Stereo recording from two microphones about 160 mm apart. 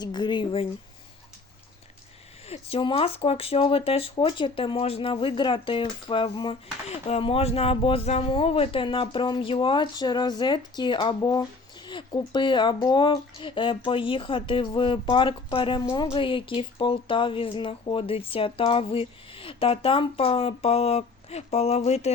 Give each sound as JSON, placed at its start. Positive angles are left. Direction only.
{"t": 0.0, "sound": "speech", "side_deg": 25}
{"t": 2.5, "sound": "speech", "side_deg": 35}